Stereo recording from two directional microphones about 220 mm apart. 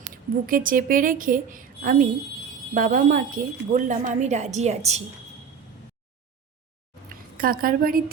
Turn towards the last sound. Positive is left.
turn(degrees=-40)  # may be behind; listen again after turning